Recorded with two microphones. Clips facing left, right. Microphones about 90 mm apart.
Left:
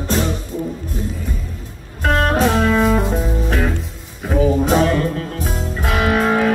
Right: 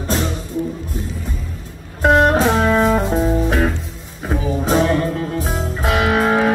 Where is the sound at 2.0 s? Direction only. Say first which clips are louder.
Right 3 dB; 20° right (ahead or behind).